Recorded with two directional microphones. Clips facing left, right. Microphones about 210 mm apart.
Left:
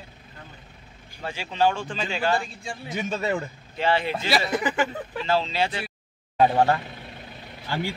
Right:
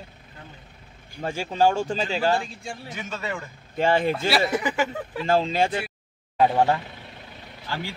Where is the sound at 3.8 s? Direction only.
45° right (ahead or behind).